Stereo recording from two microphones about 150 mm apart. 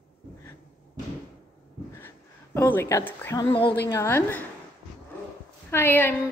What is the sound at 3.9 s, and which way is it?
Speech, 15° left (ahead or behind).